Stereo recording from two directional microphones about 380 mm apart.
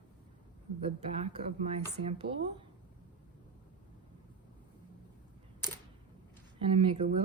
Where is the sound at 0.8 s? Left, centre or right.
Centre.